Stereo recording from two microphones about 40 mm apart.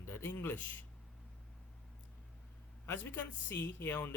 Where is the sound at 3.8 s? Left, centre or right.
Left.